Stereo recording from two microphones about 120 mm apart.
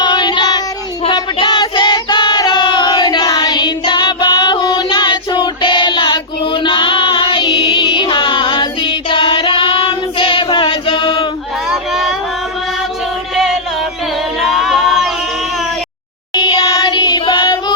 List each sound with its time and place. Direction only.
0.0 s female singing: 40° left (ahead or behind)
1.0 s child singing: 40° left (ahead or behind)
11.7 s a sound: centre (ahead or behind)
13.3 s music: centre (ahead or behind)
14.3 s a sound: centre (ahead or behind)
16.3 s singing: 30° left (ahead or behind)